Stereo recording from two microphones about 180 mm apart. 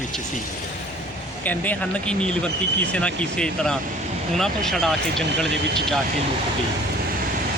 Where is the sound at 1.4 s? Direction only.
10° left (ahead or behind).